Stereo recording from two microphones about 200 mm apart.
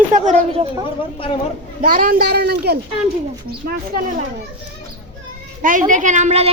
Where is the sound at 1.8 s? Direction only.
45° right (ahead or behind).